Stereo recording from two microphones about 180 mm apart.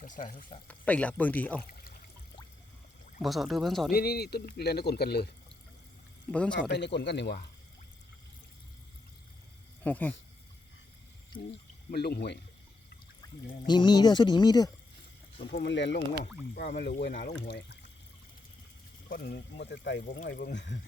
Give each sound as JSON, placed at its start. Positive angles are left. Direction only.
{"t": 0.0, "sound": "speech", "side_deg": 50}
{"t": 0.7, "sound": "speech", "side_deg": 10}
{"t": 3.2, "sound": "speech", "side_deg": 0}
{"t": 3.9, "sound": "speech", "side_deg": 60}
{"t": 6.6, "sound": "speech", "side_deg": 75}
{"t": 9.8, "sound": "speech", "side_deg": 10}
{"t": 11.9, "sound": "speech", "side_deg": 60}
{"t": 13.2, "sound": "pour", "side_deg": 20}
{"t": 13.7, "sound": "speech", "side_deg": 25}
{"t": 15.5, "sound": "speech", "side_deg": 75}
{"t": 16.6, "sound": "speech", "side_deg": 70}
{"t": 17.1, "sound": "speech", "side_deg": 50}
{"t": 17.3, "sound": "speech", "side_deg": 70}
{"t": 19.0, "sound": "speech", "side_deg": 55}